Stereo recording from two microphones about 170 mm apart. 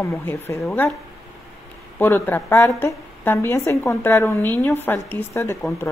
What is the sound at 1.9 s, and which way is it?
A woman's voice, 15° left (ahead or behind).